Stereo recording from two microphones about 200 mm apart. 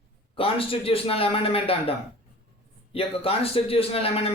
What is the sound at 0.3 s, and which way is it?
A man's voice, 30° left (ahead or behind).